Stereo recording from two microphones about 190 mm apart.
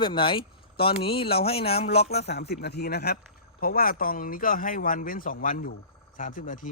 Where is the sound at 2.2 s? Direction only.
60° left (ahead or behind).